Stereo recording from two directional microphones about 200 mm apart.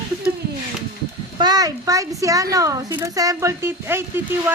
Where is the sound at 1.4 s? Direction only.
20° right (ahead or behind).